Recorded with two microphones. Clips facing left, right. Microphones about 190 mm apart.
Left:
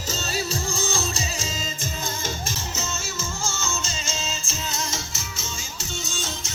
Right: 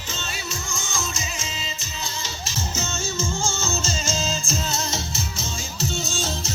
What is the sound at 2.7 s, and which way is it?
Music, 30° right (ahead or behind).